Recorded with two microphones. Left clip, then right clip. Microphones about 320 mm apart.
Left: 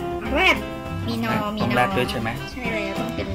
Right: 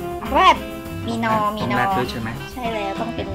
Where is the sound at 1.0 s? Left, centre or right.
Right.